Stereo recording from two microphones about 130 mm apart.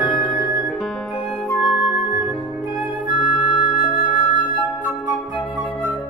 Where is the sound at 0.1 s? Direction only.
40° left (ahead or behind).